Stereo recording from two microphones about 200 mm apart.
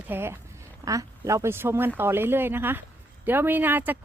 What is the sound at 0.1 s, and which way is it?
Speech, 10° right (ahead or behind).